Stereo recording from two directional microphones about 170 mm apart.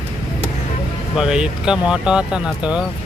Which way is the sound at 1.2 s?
5° right (ahead or behind).